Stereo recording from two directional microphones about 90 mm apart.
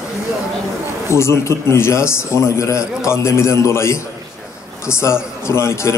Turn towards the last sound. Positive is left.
turn(degrees=30)  # may be behind; listen again after turning